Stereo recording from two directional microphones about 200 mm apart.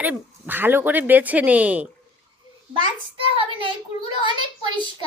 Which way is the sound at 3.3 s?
25° right (ahead or behind).